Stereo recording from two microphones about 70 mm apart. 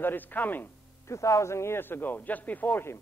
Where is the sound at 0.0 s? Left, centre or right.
Left.